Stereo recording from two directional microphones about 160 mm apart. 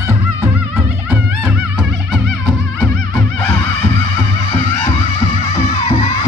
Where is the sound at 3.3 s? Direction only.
10° left (ahead or behind).